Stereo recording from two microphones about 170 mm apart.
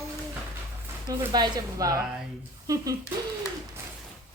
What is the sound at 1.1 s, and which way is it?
Speech, 25° right (ahead or behind).